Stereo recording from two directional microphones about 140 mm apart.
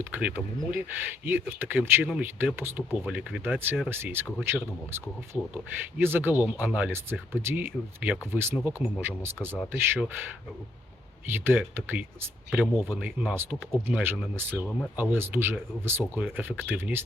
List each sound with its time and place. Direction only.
0.0 s speech: 10° right (ahead or behind)
11.3 s speech: 15° right (ahead or behind)